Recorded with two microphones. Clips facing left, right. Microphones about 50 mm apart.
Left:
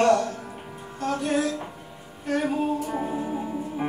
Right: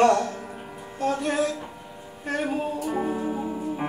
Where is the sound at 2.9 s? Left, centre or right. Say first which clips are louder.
Right 1 dB; centre.